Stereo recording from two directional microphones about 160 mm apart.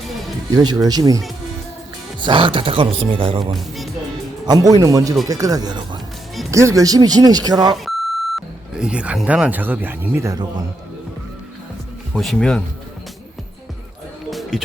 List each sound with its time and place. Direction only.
0.5 s speech: 25° right (ahead or behind)
2.2 s speech: 30° right (ahead or behind)
7.9 s speech: centre (ahead or behind); by 10.4 s 20° right (ahead or behind)
12.1 s speech: 5° left (ahead or behind)
14.3 s music: centre (ahead or behind)